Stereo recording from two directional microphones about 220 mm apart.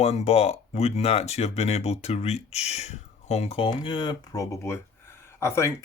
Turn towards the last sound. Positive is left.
turn(degrees=10)  # may be behind; listen again after turning